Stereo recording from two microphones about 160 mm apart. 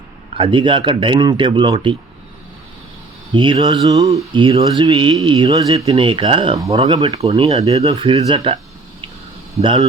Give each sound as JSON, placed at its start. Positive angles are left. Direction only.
{"t": 0.3, "sound": "speech", "side_deg": -30}
{"t": 3.3, "sound": "speech", "side_deg": -30}
{"t": 5.7, "sound": "speech", "side_deg": -35}
{"t": 7.3, "sound": "speech", "side_deg": -40}